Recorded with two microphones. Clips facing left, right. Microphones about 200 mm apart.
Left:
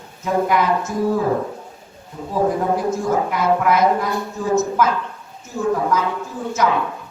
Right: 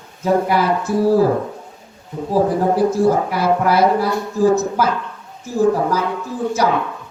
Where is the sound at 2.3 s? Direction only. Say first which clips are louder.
Right 3 dB; 35° right (ahead or behind).